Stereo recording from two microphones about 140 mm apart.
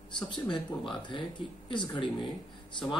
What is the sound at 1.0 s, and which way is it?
Speech, 35° left (ahead or behind).